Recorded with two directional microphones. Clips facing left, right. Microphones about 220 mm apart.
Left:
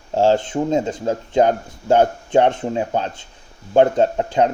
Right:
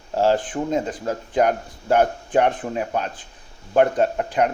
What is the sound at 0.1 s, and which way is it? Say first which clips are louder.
Speech: left 3 dB; 25° left (ahead or behind).